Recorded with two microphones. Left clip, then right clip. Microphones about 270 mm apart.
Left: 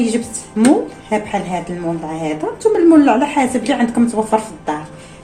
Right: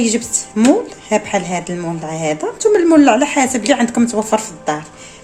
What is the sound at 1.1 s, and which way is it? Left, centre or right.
A woman's voice, right.